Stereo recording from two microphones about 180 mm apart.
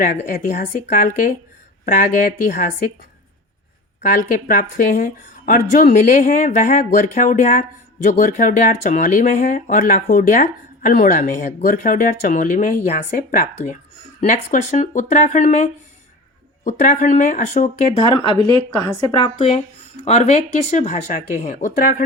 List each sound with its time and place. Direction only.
0.0 s speech: 50° left (ahead or behind)
4.0 s speech: 50° left (ahead or behind)
19.1 s speech: 30° left (ahead or behind); by 22.0 s 50° left (ahead or behind)